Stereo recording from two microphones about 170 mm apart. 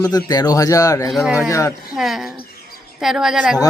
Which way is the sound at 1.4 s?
20° left (ahead or behind).